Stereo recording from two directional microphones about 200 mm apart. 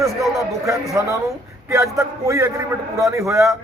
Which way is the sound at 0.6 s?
15° right (ahead or behind).